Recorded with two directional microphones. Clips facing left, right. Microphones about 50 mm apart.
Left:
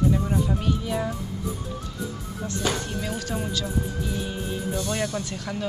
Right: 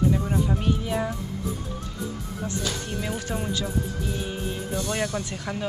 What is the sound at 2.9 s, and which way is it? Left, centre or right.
Speech, centre.